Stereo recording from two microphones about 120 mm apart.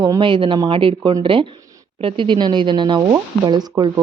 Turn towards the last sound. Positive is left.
turn(degrees=-35)  # may be behind; listen again after turning